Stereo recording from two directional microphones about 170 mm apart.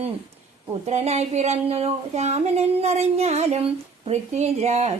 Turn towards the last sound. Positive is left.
turn(degrees=-40)  # may be behind; listen again after turning